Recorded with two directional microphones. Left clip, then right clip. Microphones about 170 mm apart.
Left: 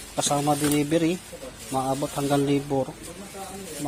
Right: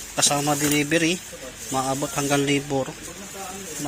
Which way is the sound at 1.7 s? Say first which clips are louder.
Right 1 dB; centre (ahead or behind).